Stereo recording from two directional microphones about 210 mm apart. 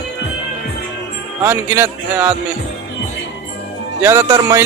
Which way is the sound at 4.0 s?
10° right (ahead or behind).